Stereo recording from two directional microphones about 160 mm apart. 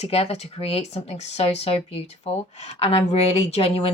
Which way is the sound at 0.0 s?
40° left (ahead or behind).